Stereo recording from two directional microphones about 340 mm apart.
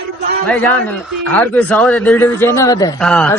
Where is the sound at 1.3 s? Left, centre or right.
Centre.